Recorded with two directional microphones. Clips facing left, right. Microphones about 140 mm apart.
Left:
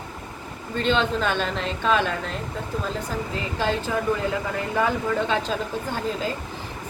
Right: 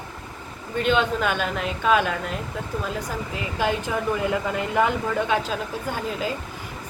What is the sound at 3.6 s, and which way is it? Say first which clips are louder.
Speech: even; 15° right (ahead or behind).